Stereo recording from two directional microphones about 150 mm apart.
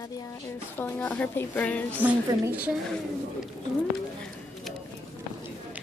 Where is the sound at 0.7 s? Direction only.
10° left (ahead or behind).